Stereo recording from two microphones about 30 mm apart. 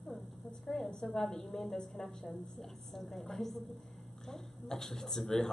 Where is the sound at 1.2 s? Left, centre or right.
Centre.